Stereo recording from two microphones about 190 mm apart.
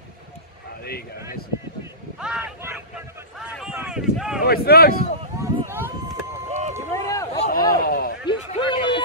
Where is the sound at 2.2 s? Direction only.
5° right (ahead or behind).